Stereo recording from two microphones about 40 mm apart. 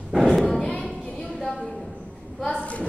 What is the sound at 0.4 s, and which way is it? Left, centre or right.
Thump, centre.